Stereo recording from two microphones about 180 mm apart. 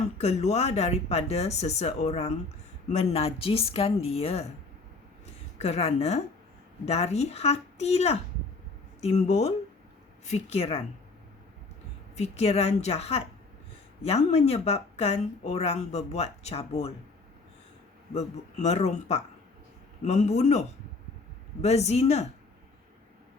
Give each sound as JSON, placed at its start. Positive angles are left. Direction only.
{"t": 0.2, "sound": "speech", "side_deg": 35}
{"t": 5.2, "sound": "a sound", "side_deg": 35}
{"t": 6.8, "sound": "speech", "side_deg": 35}
{"t": 12.1, "sound": "speech", "side_deg": 35}
{"t": 18.1, "sound": "speech", "side_deg": 40}